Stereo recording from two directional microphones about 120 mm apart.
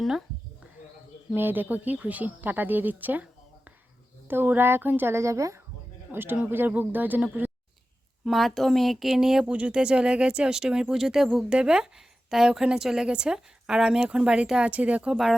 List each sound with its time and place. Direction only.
0.0 s speech: centre (ahead or behind)
1.4 s a woman's voice: 15° right (ahead or behind)
4.3 s a woman's voice: 15° right (ahead or behind)
8.2 s a woman's voice: centre (ahead or behind)